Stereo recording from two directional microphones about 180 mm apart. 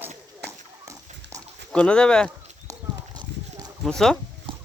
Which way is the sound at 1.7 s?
5° left (ahead or behind).